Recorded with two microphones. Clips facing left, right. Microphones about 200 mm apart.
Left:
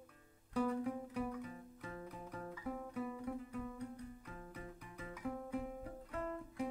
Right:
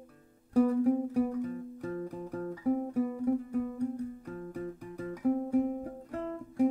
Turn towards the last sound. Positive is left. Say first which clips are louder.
# right 11 dB
turn(degrees=-45)  # may be behind; listen again after turning